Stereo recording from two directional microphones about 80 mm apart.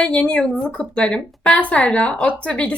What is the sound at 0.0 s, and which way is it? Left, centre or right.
Speech, centre.